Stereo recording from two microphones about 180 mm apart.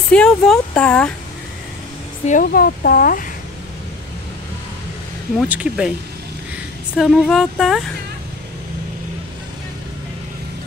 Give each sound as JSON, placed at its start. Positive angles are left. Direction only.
{"t": 0.1, "sound": "speech", "side_deg": 5}
{"t": 2.2, "sound": "speech", "side_deg": 50}
{"t": 5.5, "sound": "speech", "side_deg": -5}
{"t": 7.0, "sound": "speech", "side_deg": 0}